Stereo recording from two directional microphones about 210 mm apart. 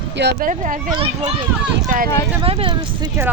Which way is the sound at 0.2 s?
45° right (ahead or behind).